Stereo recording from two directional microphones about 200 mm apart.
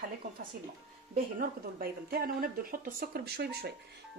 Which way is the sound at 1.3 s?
50° right (ahead or behind).